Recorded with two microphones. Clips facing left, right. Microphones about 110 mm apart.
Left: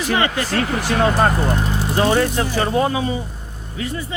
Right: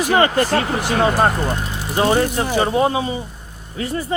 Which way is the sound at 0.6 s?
20° right (ahead or behind).